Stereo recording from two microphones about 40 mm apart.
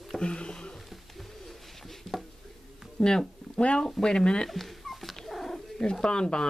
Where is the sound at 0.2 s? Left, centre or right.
Left.